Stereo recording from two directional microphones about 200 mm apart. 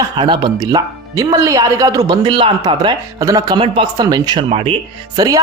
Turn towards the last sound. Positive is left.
turn(degrees=-15)  # may be behind; listen again after turning